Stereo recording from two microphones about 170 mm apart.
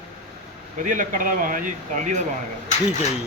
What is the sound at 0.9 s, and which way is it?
Speech, 50° right (ahead or behind).